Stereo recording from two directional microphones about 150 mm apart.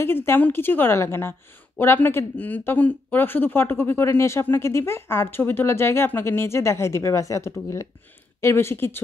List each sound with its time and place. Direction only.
0.0 s speech: 15° left (ahead or behind)